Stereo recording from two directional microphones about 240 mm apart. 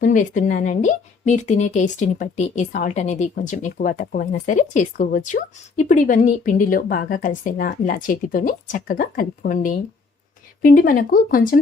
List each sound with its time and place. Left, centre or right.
0.0 s speech: left